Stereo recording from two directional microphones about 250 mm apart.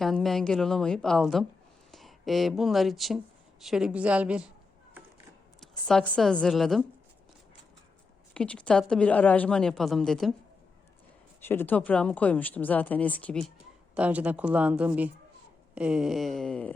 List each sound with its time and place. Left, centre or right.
0.0 s a woman's voice: centre
5.5 s speech: centre
8.3 s a woman's voice: centre
11.4 s a woman's voice: centre